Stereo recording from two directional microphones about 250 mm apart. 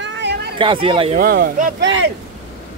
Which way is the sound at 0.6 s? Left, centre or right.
Right.